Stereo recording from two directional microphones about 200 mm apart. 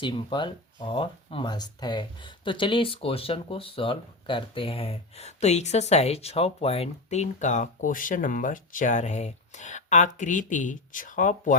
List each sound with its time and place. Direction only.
0.0 s speech: 25° left (ahead or behind); by 11.5 s 40° left (ahead or behind)